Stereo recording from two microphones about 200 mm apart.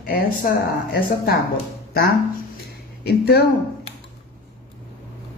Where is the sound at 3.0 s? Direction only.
50° left (ahead or behind).